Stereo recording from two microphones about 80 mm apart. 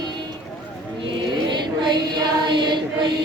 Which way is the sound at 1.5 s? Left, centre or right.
Right.